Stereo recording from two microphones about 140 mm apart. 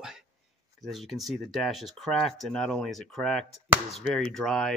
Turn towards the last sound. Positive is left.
turn(degrees=5)  # may be behind; listen again after turning